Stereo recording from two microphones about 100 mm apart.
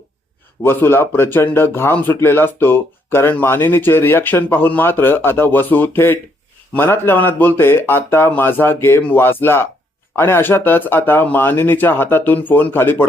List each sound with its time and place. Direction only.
0.6 s speech: 25° left (ahead or behind)